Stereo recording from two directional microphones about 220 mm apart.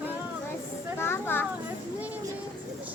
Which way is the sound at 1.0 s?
10° left (ahead or behind).